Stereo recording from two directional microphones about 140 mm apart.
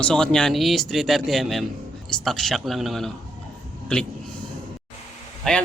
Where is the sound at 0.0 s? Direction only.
5° left (ahead or behind).